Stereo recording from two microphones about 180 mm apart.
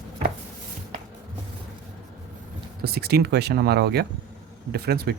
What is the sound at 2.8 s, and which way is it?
Speech, 60° right (ahead or behind).